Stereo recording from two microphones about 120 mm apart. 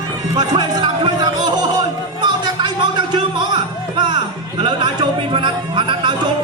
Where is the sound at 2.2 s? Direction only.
40° right (ahead or behind).